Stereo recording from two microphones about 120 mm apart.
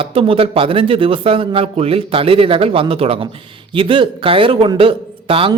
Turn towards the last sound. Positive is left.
turn(degrees=-50)  # may be behind; listen again after turning